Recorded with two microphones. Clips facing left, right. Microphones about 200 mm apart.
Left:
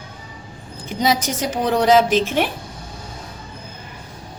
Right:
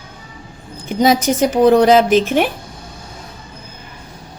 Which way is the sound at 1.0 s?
50° right (ahead or behind).